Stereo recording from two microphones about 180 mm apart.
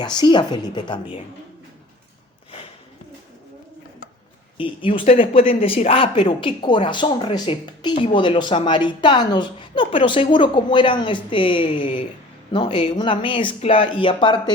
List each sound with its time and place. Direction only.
0.0 s speech: 25° left (ahead or behind)
4.5 s speech: 30° left (ahead or behind)